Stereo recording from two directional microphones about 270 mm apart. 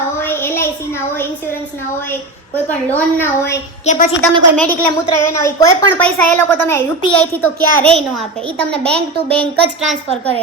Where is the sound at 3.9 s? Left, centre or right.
Left.